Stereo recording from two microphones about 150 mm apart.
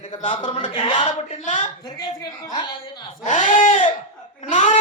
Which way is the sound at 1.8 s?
30° left (ahead or behind).